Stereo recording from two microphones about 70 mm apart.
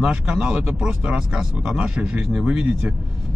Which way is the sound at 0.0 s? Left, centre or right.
Centre.